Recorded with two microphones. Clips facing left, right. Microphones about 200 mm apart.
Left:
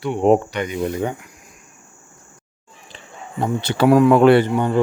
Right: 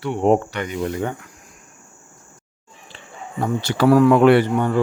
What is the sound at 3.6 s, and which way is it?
Speech, 20° left (ahead or behind).